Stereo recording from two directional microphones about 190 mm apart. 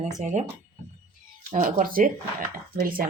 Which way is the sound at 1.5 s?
40° right (ahead or behind).